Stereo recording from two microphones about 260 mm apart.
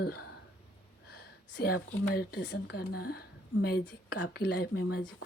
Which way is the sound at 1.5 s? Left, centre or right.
Left.